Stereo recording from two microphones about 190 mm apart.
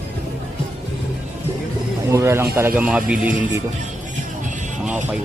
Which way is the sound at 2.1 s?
15° right (ahead or behind).